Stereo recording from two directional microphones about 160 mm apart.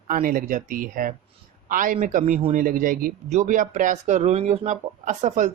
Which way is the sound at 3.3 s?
50° right (ahead or behind).